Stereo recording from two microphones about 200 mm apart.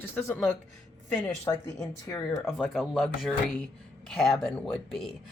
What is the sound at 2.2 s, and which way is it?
Speech, 5° left (ahead or behind).